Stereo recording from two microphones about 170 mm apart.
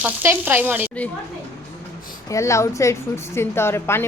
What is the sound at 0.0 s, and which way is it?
Sizzle, 10° right (ahead or behind).